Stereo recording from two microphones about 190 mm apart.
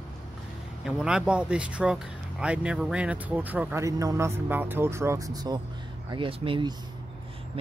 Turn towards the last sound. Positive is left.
turn(degrees=-25)  # may be behind; listen again after turning